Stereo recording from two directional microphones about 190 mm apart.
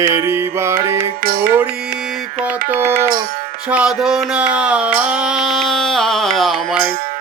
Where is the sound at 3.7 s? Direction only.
5° right (ahead or behind).